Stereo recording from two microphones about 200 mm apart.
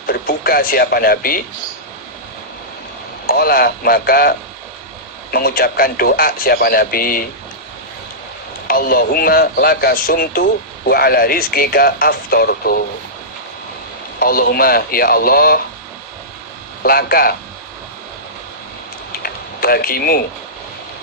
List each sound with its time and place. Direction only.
0.1 s speech: 50° left (ahead or behind)
3.2 s speech: 50° left (ahead or behind)
8.6 s speech: 45° left (ahead or behind)
14.2 s speech: 50° left (ahead or behind)
16.8 s speech: 50° left (ahead or behind)
19.2 s a sound: 50° left (ahead or behind)